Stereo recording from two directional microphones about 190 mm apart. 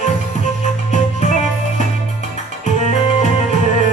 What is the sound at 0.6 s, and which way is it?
Music, 40° left (ahead or behind).